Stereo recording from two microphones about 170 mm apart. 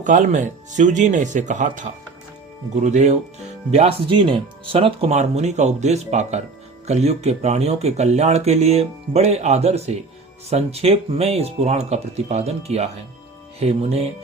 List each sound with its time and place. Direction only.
0.0 s speech: 45° right (ahead or behind)